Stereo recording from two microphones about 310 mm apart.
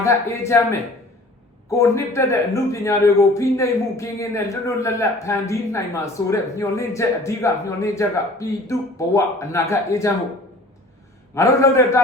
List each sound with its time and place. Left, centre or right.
0.0 s speech: centre
11.3 s speech: centre